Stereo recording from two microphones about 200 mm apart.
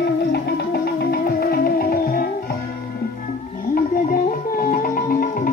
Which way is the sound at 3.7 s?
45° left (ahead or behind).